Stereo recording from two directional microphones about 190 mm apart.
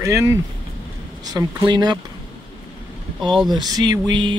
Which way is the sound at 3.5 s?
20° right (ahead or behind).